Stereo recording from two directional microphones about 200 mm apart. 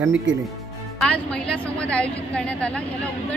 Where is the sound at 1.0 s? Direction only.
5° left (ahead or behind).